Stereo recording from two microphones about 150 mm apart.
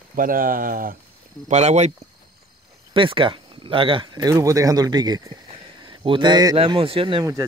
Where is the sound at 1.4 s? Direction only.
50° right (ahead or behind).